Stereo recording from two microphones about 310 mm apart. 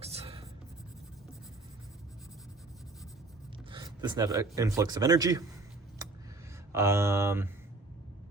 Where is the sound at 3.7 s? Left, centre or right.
Centre.